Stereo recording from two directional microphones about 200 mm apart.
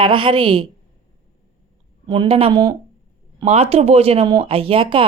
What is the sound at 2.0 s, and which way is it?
Speech, 25° right (ahead or behind).